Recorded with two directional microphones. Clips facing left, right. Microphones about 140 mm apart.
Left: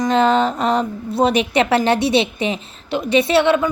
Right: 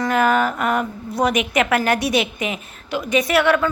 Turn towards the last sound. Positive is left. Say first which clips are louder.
# left 2 dB
turn(degrees=25)  # may be behind; listen again after turning